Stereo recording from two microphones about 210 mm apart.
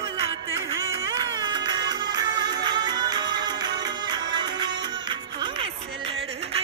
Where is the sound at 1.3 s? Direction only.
20° right (ahead or behind).